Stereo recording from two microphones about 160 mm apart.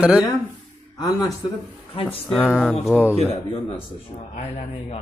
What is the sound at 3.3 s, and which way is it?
Speech, 35° left (ahead or behind).